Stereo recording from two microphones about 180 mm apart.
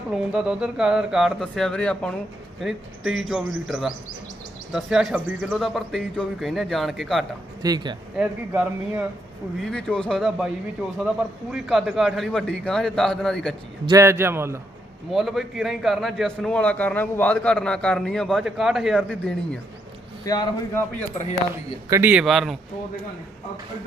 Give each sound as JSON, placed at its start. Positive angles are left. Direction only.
{"t": 0.1, "sound": "a man's voice", "side_deg": -5}
{"t": 7.6, "sound": "speech", "side_deg": -20}
{"t": 8.1, "sound": "speech", "side_deg": -10}
{"t": 9.6, "sound": "a man's voice", "side_deg": 5}
{"t": 13.8, "sound": "speech", "side_deg": -15}
{"t": 15.1, "sound": "a man's voice", "side_deg": 0}
{"t": 20.2, "sound": "speech", "side_deg": 20}
{"t": 21.2, "sound": "speech", "side_deg": 40}
{"t": 21.8, "sound": "a man's voice", "side_deg": -15}